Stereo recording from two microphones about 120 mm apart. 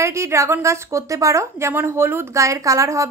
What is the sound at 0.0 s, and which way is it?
A woman's voice, 25° right (ahead or behind).